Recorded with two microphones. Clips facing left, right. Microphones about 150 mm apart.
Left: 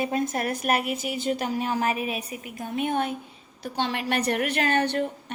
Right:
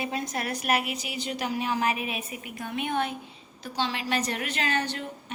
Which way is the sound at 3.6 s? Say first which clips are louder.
Left 2 dB; 55° left (ahead or behind).